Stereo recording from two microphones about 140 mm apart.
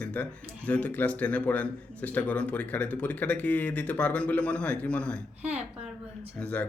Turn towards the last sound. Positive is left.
turn(degrees=10)  # may be behind; listen again after turning